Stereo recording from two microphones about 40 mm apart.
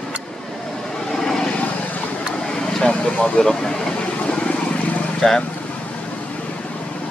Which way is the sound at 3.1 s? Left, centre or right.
Left.